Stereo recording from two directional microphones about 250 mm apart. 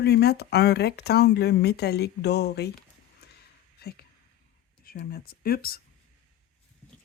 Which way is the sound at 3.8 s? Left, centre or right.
Left.